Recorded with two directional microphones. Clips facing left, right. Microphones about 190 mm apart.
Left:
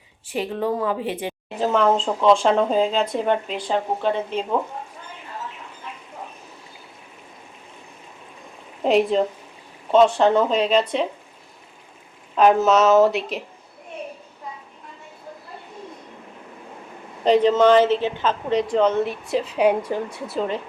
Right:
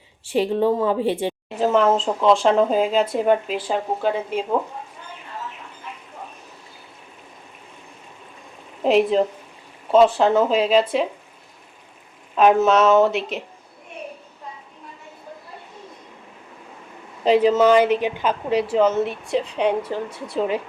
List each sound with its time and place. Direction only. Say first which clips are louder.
0.3 s speech: right 5 dB; 30° right (ahead or behind)
1.5 s a woman's voice: right 1 dB; centre (ahead or behind)
8.8 s a woman's voice: right 1 dB; centre (ahead or behind)
12.4 s a woman's voice: even; centre (ahead or behind)
17.2 s a woman's voice: even; 5° right (ahead or behind); by 20.3 s 10° left (ahead or behind)